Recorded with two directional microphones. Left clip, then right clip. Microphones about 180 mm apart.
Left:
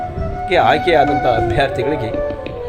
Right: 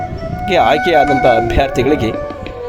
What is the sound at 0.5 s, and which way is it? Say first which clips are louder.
Speech: right 2 dB; 45° right (ahead or behind).